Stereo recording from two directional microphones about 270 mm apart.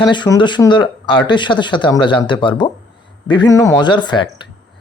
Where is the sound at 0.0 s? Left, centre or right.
Centre.